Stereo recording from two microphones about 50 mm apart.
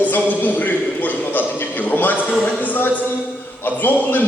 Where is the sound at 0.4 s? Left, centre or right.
Left.